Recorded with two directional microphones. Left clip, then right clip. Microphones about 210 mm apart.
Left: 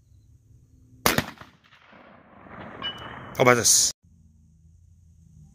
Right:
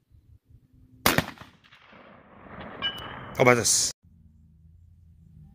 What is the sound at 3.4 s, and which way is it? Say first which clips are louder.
Speech: left 2 dB; 5° left (ahead or behind).